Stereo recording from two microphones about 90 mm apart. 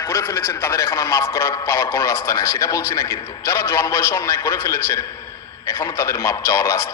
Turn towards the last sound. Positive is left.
turn(degrees=35)  # may be behind; listen again after turning